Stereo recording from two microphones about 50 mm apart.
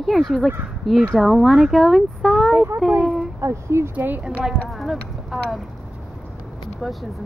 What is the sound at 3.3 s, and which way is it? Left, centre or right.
Speech, right.